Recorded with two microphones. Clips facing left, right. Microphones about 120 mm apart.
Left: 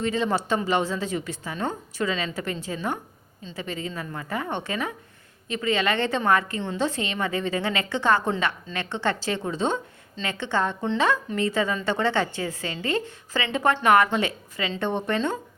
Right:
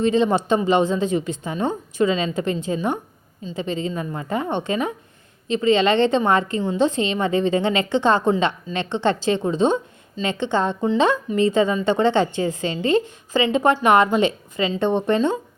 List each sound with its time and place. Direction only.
0.0 s a woman's voice: 20° right (ahead or behind)